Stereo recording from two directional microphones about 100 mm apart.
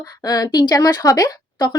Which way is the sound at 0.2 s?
40° left (ahead or behind).